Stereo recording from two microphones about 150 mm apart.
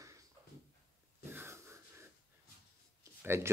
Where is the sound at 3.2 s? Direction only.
15° right (ahead or behind).